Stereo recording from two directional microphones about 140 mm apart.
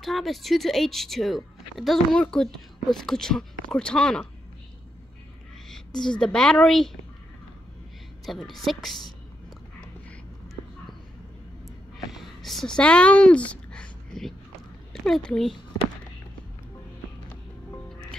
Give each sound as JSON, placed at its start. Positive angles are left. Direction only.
{"t": 0.0, "sound": "speech", "side_deg": 0}
{"t": 5.9, "sound": "speech", "side_deg": 5}
{"t": 8.3, "sound": "speech", "side_deg": 0}
{"t": 12.1, "sound": "a sound", "side_deg": 0}
{"t": 14.9, "sound": "a child's voice", "side_deg": 5}